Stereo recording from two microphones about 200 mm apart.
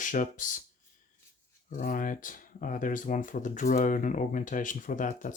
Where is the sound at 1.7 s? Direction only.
40° left (ahead or behind).